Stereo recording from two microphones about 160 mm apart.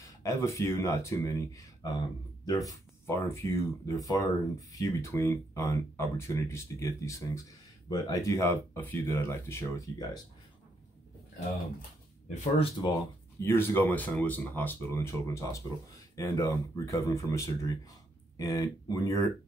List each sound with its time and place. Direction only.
0.0 s speech: 20° left (ahead or behind)
12.8 s speech: 30° left (ahead or behind)
13.4 s speech: 15° left (ahead or behind)